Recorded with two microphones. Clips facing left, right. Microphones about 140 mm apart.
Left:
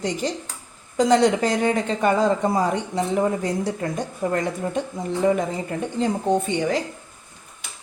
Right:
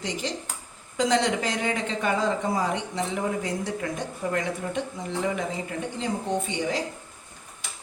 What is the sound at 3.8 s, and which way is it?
Speech, 35° left (ahead or behind).